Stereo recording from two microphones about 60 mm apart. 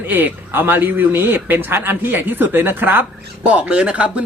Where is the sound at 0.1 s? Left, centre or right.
Right.